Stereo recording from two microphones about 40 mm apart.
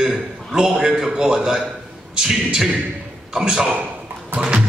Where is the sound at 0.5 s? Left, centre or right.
Centre.